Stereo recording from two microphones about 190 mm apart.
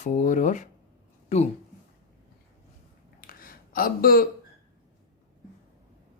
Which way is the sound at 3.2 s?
50° left (ahead or behind).